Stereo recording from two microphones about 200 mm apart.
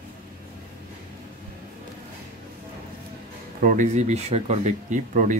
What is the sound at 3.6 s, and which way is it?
Speech, 40° right (ahead or behind).